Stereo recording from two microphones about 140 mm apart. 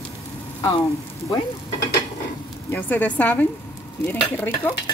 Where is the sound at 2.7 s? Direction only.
15° left (ahead or behind).